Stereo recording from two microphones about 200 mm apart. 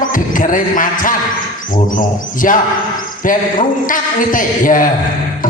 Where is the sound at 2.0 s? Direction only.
40° left (ahead or behind).